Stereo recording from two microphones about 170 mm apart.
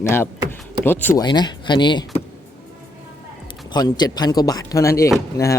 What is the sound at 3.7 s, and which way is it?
Speech, 25° left (ahead or behind).